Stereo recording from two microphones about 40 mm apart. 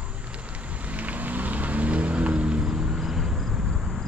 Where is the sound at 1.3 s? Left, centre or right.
Right.